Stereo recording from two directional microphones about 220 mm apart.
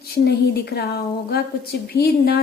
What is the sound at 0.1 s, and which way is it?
Speech, 45° left (ahead or behind).